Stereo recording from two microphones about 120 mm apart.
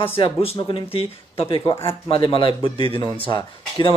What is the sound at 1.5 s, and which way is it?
Speech, 45° left (ahead or behind).